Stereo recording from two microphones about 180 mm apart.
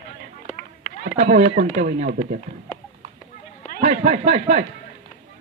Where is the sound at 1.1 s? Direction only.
50° right (ahead or behind).